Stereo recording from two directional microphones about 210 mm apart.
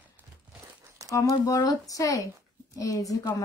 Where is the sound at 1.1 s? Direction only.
15° left (ahead or behind).